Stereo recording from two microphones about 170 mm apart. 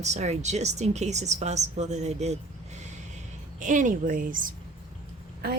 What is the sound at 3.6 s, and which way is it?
Speech, 50° right (ahead or behind).